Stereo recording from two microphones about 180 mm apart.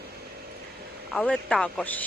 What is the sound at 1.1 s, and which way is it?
Speech, 5° left (ahead or behind).